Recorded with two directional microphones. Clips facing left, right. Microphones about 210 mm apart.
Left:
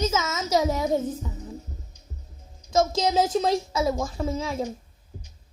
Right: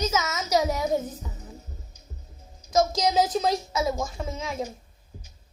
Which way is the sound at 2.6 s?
25° left (ahead or behind).